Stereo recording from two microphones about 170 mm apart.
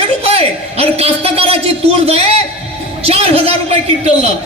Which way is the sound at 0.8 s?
35° right (ahead or behind).